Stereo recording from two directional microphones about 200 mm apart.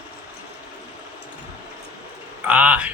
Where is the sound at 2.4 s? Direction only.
5° right (ahead or behind).